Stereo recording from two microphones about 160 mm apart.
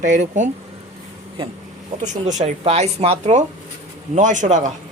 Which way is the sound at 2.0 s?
50° right (ahead or behind).